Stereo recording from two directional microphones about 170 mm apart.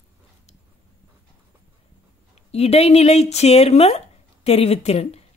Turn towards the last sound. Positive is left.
turn(degrees=40)  # may be behind; listen again after turning